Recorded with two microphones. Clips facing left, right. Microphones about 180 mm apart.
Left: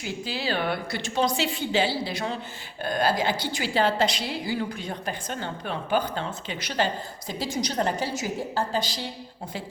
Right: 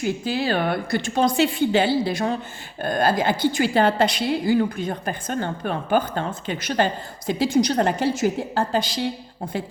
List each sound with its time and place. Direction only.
0.0 s a woman's voice: 50° right (ahead or behind)